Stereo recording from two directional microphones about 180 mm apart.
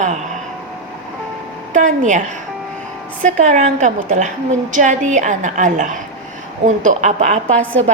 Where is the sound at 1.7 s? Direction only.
45° right (ahead or behind).